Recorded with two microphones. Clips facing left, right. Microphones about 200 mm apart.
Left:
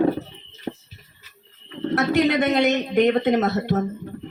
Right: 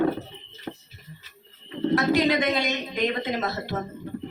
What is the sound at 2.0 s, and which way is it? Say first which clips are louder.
Speech: left 4 dB; 65° left (ahead or behind).